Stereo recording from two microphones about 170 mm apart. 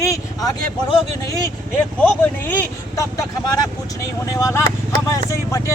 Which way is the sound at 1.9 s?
10° left (ahead or behind).